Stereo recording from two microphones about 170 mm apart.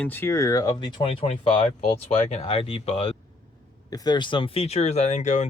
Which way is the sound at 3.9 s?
25° left (ahead or behind).